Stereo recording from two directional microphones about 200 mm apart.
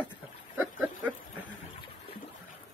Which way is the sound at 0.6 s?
Centre (ahead or behind).